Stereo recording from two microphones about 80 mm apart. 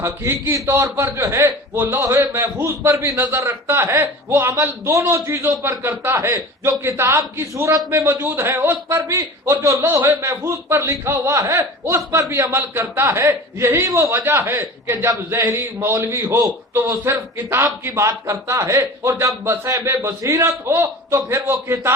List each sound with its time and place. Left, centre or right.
0.0 s a man's voice: right
4.5 s speech: right
5.5 s a man's voice: right
9.0 s a man's voice: right